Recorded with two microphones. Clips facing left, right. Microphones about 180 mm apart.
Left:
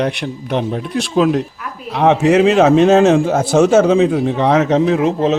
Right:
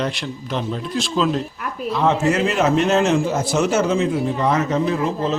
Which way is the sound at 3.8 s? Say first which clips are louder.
Left 6 dB; 80° left.